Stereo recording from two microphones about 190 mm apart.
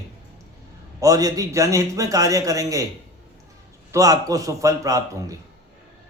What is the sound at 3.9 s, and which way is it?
A man's voice, 20° right (ahead or behind).